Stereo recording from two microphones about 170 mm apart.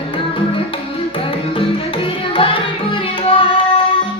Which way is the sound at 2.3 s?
30° left (ahead or behind).